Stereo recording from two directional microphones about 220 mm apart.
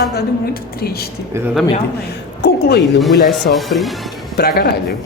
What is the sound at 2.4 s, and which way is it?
Speech, 45° left (ahead or behind).